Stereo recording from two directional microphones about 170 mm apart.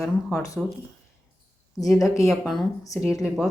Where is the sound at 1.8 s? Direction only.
Centre (ahead or behind).